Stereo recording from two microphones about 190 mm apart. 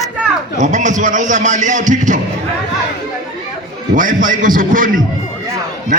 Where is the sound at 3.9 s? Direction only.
45° right (ahead or behind).